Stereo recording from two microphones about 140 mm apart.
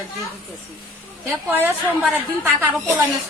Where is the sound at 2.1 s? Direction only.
15° right (ahead or behind).